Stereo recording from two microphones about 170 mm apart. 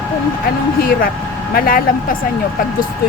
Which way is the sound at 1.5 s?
55° left (ahead or behind).